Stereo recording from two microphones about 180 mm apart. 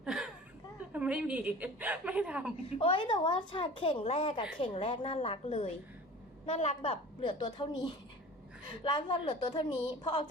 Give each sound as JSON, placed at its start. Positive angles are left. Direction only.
{"t": 0.0, "sound": "a sound", "side_deg": -5}
{"t": 0.9, "sound": "a woman's voice", "side_deg": -5}
{"t": 2.6, "sound": "a woman's voice", "side_deg": 30}